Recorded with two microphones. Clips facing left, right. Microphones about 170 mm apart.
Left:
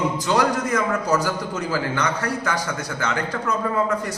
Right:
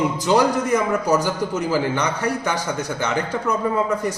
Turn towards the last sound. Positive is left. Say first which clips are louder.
# right 2 dB
turn(degrees=-15)  # may be behind; listen again after turning